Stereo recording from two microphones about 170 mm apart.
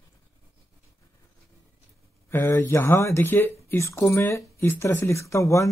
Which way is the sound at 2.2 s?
15° left (ahead or behind).